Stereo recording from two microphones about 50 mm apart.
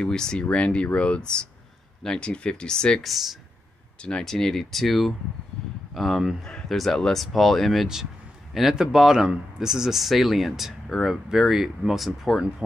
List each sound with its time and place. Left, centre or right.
0.0 s speech: centre
3.0 s speech: centre
4.2 s speech: centre
5.6 s a sound: centre
5.9 s speech: centre
6.4 s speech: centre
7.8 s speech: centre